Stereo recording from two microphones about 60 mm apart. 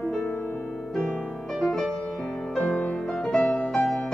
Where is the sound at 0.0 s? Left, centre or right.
Centre.